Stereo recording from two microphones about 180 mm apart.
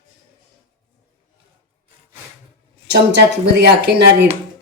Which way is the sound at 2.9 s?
65° right (ahead or behind).